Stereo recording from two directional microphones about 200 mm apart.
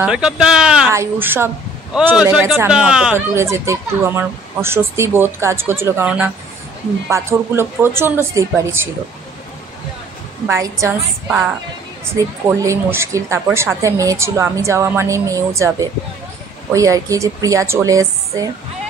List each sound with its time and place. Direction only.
0.0 s speech: 5° right (ahead or behind)
10.4 s speech: 15° right (ahead or behind)